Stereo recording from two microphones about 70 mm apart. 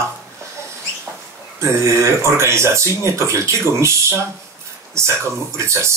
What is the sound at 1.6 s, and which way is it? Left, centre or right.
Speech, right.